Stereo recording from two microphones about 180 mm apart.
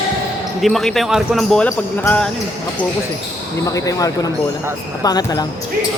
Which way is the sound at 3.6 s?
20° left (ahead or behind).